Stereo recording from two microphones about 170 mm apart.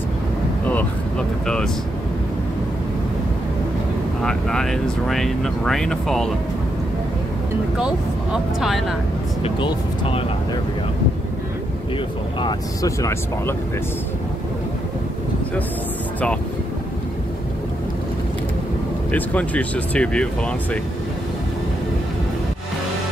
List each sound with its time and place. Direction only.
0.7 s vehicle: 5° left (ahead or behind)
4.2 s speech: 5° left (ahead or behind)
7.7 s speech: 5° right (ahead or behind)
9.4 s speech: 30° left (ahead or behind)
12.4 s speech: 25° left (ahead or behind)
19.1 s speech: 10° left (ahead or behind)